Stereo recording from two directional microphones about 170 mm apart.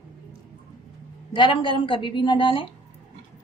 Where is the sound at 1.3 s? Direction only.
30° left (ahead or behind).